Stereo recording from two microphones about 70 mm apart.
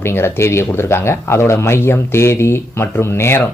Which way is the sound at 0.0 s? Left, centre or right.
Left.